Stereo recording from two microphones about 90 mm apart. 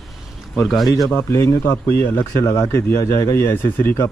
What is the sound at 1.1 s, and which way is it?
Speech, 35° left (ahead or behind).